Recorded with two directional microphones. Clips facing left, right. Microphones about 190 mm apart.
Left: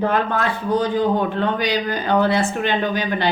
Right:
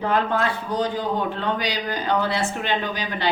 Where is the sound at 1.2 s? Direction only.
50° left (ahead or behind).